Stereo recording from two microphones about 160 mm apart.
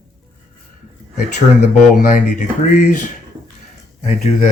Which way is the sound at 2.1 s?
55° left (ahead or behind).